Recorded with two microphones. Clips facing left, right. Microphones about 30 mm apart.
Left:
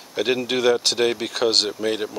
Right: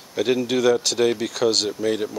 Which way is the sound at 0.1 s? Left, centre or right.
Left.